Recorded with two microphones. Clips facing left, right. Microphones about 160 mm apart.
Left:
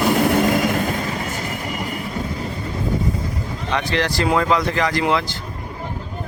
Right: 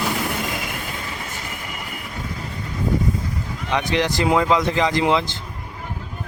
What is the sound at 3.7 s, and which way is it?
Speech, 20° right (ahead or behind).